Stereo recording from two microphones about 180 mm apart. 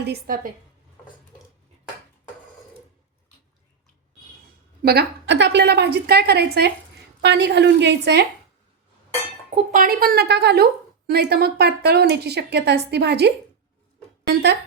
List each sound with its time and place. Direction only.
0.0 s a woman's voice: 60° right (ahead or behind)
4.8 s a woman's voice: 60° right (ahead or behind)
9.7 s a woman's voice: 55° right (ahead or behind)